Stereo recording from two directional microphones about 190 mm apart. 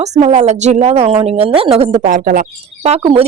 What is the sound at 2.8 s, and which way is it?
Speech, 30° right (ahead or behind).